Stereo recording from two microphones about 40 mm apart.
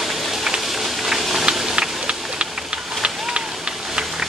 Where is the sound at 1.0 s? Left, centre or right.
Centre.